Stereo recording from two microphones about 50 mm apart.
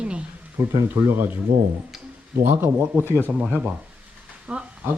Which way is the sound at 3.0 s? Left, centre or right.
Left.